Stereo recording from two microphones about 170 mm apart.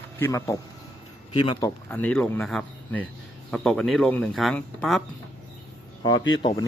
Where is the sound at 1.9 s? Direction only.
10° left (ahead or behind).